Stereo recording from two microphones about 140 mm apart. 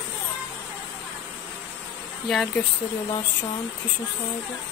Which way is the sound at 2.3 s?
5° left (ahead or behind).